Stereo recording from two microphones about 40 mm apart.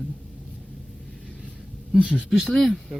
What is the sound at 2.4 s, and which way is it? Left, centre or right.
Speech, centre.